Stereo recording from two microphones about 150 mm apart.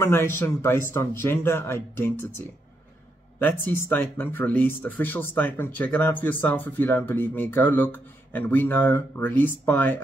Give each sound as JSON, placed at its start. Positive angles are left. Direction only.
{"t": 0.0, "sound": "speech", "side_deg": 15}